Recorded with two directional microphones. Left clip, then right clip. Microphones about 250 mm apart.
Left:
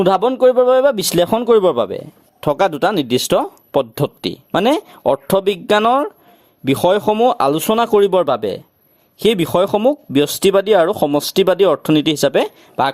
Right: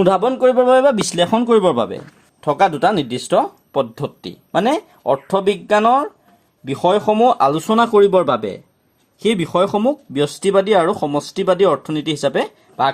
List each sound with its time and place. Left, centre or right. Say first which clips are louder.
0.0 s speech: left 1 dB; left